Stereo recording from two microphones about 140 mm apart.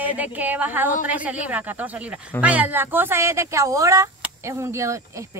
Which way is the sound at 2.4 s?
10° right (ahead or behind).